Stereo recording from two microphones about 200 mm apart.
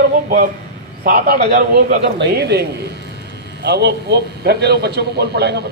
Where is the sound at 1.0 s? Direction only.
45° right (ahead or behind).